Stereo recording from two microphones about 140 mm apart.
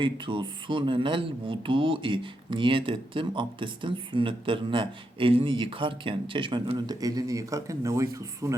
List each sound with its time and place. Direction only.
0.0 s speech: 35° right (ahead or behind)